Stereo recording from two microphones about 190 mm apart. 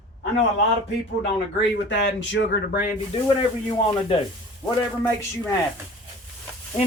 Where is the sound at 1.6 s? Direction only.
70° left (ahead or behind).